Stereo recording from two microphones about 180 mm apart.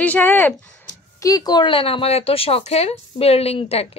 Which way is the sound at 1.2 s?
20° left (ahead or behind).